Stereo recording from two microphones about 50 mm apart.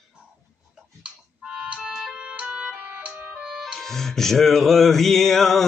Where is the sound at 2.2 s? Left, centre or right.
Right.